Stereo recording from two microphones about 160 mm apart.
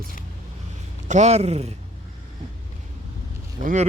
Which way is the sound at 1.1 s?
45° right (ahead or behind).